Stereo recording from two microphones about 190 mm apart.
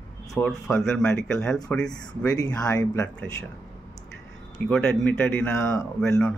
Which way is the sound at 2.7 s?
20° left (ahead or behind).